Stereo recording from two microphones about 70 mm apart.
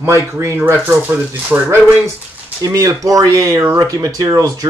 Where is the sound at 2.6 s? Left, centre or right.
Right.